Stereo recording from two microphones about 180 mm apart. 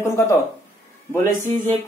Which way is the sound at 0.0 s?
15° left (ahead or behind).